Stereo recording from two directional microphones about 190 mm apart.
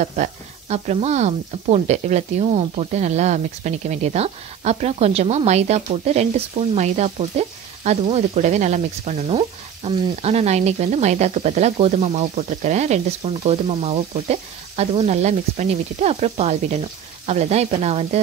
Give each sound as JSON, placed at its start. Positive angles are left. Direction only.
{"t": 0.0, "sound": "sizzle", "side_deg": -40}